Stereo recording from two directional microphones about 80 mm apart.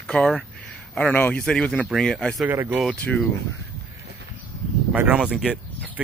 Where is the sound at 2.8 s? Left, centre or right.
Centre.